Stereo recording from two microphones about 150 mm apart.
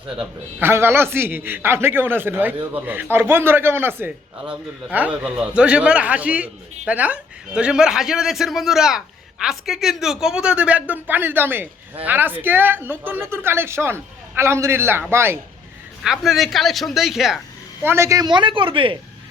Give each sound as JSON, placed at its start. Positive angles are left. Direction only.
{"t": 0.2, "sound": "a man's voice", "side_deg": -15}
{"t": 16.0, "sound": "a woman's voice", "side_deg": 0}
{"t": 17.8, "sound": "speech", "side_deg": -15}